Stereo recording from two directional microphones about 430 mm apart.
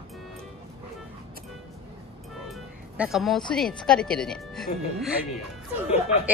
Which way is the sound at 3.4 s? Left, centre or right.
Centre.